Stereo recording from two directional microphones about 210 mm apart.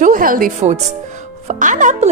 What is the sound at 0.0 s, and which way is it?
Speech, 40° right (ahead or behind).